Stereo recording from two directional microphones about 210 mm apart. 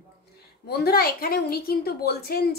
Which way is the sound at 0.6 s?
50° left (ahead or behind).